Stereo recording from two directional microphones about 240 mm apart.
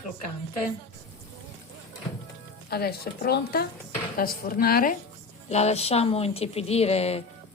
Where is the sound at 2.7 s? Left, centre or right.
Left.